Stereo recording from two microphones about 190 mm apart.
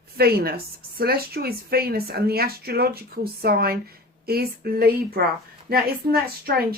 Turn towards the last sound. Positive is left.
turn(degrees=-55)  # may be behind; listen again after turning